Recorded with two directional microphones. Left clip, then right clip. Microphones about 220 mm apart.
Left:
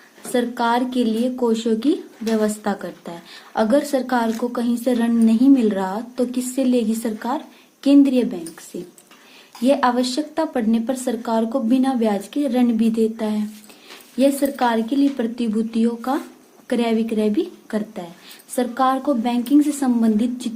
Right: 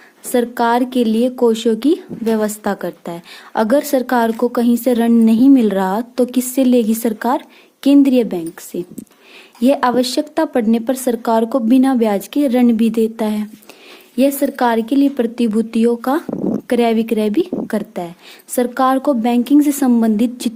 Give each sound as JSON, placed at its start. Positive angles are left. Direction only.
{"t": 0.3, "sound": "a woman's voice", "side_deg": -45}